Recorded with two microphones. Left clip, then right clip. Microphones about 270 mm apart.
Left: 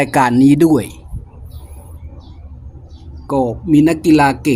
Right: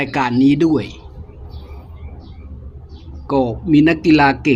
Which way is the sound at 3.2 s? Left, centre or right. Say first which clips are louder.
Left 1 dB; centre.